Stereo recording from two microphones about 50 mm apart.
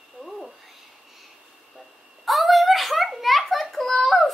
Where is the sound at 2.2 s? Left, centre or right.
Centre.